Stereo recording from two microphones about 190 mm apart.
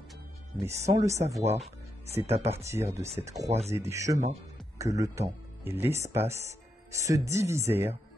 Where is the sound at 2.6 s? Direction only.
15° right (ahead or behind).